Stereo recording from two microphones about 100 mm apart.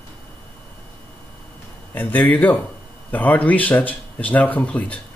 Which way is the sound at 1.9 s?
15° left (ahead or behind).